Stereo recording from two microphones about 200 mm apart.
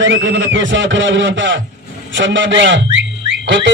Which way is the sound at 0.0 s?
65° right (ahead or behind).